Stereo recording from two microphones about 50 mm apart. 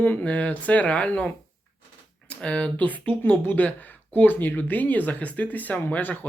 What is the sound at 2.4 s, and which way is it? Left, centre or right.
Speech, left.